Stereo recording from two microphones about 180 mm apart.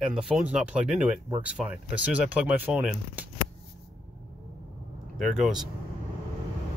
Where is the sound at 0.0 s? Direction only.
5° right (ahead or behind).